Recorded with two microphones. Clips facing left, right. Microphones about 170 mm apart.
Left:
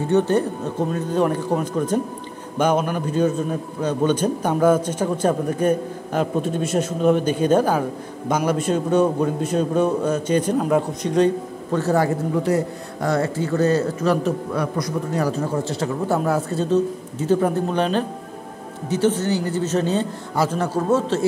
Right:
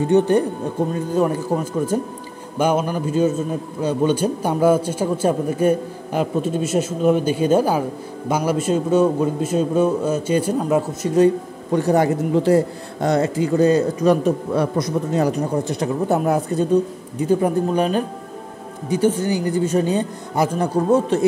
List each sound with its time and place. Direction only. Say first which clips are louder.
0.1 s a man's voice: right 2 dB; 15° right (ahead or behind)